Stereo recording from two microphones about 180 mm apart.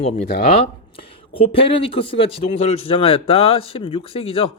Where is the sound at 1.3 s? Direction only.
30° left (ahead or behind).